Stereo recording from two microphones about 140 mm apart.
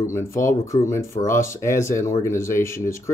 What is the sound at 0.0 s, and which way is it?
Speech, 20° left (ahead or behind).